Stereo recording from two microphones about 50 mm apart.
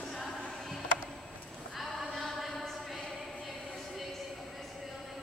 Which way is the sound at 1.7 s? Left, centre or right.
Centre.